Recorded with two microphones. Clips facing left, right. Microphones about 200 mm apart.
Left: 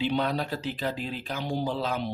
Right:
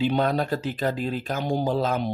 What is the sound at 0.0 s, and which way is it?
Speech, 45° right (ahead or behind).